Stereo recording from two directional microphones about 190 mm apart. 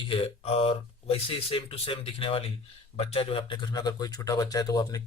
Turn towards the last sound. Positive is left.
turn(degrees=20)  # may be behind; listen again after turning